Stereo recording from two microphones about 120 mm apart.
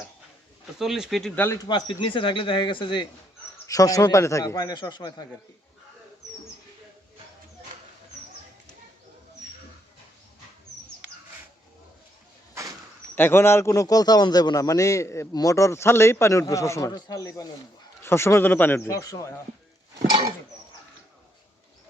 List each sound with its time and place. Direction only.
0.8 s speech: 5° right (ahead or behind)
1.4 s a man's voice: 20° left (ahead or behind)
1.6 s speech: 40° left (ahead or behind)
3.7 s a man's voice: 30° left (ahead or behind)
13.1 s a man's voice: 20° left (ahead or behind)